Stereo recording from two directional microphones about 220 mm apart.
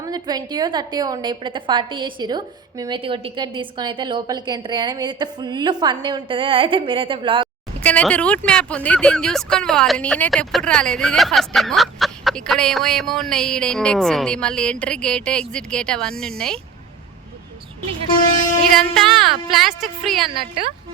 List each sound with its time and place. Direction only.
0.0 s a woman's voice: 15° right (ahead or behind)
7.8 s speech: 5° left (ahead or behind)
18.6 s speech: centre (ahead or behind)
20.3 s a woman's voice: 25° right (ahead or behind)